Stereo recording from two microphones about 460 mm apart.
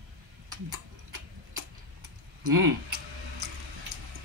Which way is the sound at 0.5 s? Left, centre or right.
Right.